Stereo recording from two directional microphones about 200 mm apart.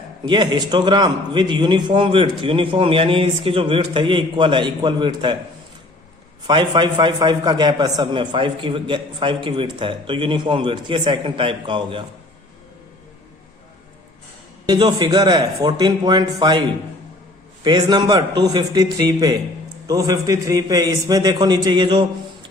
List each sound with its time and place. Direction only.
0.3 s a man's voice: 20° right (ahead or behind)
6.5 s a man's voice: 20° right (ahead or behind)
14.7 s a man's voice: 20° right (ahead or behind)